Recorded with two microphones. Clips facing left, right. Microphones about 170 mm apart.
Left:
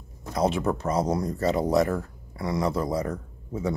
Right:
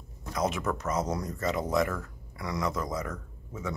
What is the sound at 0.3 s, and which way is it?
Speech, 30° left (ahead or behind).